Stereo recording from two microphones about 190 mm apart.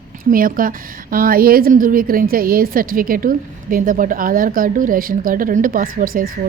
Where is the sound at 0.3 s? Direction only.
45° right (ahead or behind).